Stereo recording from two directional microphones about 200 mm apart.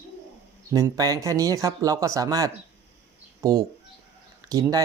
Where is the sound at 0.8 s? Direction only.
15° right (ahead or behind).